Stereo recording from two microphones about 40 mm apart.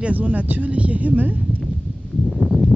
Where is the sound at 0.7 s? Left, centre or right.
Right.